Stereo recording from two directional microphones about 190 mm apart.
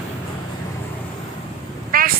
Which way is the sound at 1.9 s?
50° right (ahead or behind).